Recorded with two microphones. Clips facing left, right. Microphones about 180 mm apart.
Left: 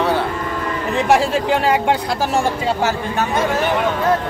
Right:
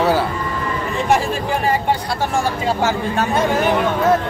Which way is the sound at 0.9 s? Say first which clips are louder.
Left 3 dB; 75° left (ahead or behind).